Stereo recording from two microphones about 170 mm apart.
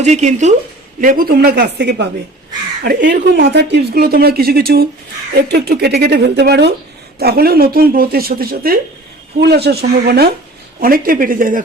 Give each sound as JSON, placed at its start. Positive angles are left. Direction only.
{"t": 0.0, "sound": "speech", "side_deg": -40}
{"t": 1.0, "sound": "speech", "side_deg": -55}
{"t": 7.2, "sound": "speech", "side_deg": -65}
{"t": 9.4, "sound": "speech", "side_deg": -70}